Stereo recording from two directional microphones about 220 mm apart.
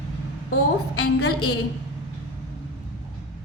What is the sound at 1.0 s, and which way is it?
Speech, 90° left.